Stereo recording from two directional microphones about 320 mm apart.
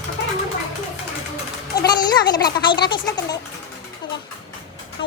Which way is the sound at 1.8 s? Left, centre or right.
Centre.